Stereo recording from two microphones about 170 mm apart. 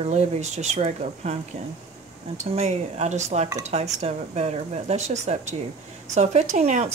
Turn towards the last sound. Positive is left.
turn(degrees=-45)  # may be behind; listen again after turning